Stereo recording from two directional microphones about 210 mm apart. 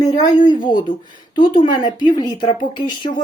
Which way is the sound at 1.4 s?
20° left (ahead or behind).